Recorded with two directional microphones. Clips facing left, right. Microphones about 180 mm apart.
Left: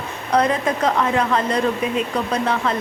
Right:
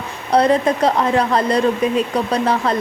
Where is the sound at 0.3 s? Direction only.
35° right (ahead or behind).